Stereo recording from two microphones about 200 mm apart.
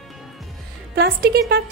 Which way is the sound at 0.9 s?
55° right (ahead or behind).